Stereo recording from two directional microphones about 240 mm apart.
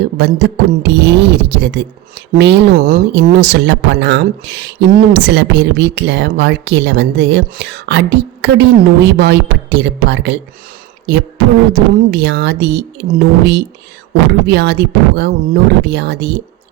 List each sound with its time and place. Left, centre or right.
0.2 s a woman's voice: right
11.7 s a woman's voice: right